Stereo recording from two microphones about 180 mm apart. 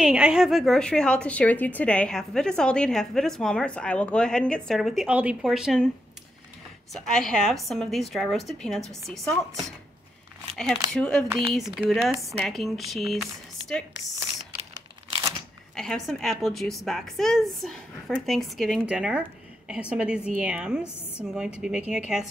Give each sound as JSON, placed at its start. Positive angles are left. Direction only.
{"t": 0.0, "sound": "a woman's voice", "side_deg": -5}
{"t": 6.9, "sound": "a woman's voice", "side_deg": 0}
{"t": 10.9, "sound": "a woman's voice", "side_deg": 5}
{"t": 14.7, "sound": "crumpling", "side_deg": -20}
{"t": 15.7, "sound": "a woman's voice", "side_deg": 0}